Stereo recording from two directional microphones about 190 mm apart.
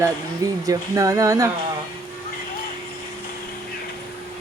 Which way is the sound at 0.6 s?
20° right (ahead or behind).